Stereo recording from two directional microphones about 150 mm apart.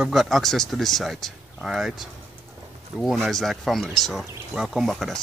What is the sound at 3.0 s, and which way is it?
Speech, centre (ahead or behind).